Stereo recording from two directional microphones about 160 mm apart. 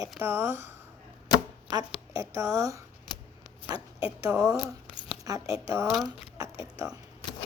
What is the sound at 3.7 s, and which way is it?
A woman's voice, 25° right (ahead or behind).